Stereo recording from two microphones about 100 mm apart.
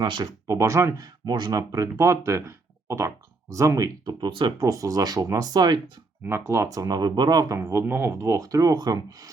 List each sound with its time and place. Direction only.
0.0 s speech: 45° right (ahead or behind); by 1.0 s 30° right (ahead or behind)
1.2 s speech: 45° right (ahead or behind)
2.8 s a sound: 30° right (ahead or behind)
3.5 s speech: 30° right (ahead or behind)
4.3 s speech: 55° right (ahead or behind)
4.6 s speech: 35° right (ahead or behind)
6.2 s speech: 25° right (ahead or behind)